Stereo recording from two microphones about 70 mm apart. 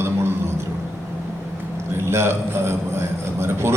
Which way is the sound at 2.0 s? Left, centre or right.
Right.